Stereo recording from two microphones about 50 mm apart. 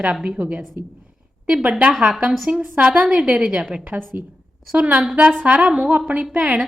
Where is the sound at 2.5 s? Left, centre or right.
Right.